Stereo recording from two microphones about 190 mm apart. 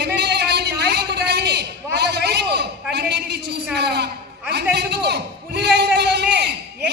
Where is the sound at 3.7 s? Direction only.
60° right (ahead or behind).